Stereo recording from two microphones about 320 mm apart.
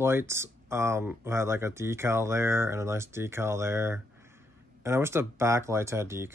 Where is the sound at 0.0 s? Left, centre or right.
Centre.